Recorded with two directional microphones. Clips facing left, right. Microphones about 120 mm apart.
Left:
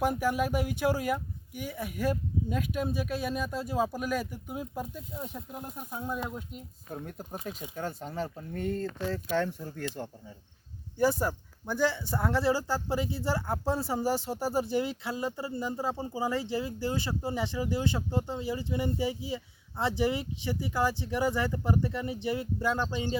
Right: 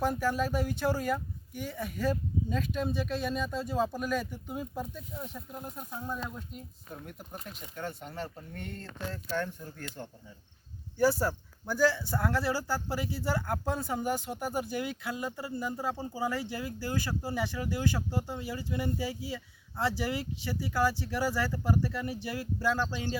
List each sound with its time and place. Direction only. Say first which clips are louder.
0.0 s speech: left 2 dB; 15° left (ahead or behind)
7.8 s speech: left 2 dB; 40° left (ahead or behind)
9.3 s speech: left 3 dB; 85° left
10.9 s speech: even; 20° left (ahead or behind)